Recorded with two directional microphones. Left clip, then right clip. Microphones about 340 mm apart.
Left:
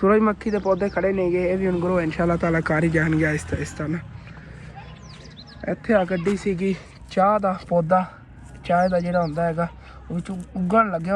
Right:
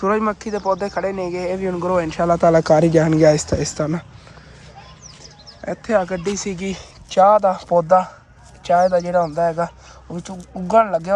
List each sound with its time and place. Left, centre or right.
0.0 s speech: centre
5.6 s speech: centre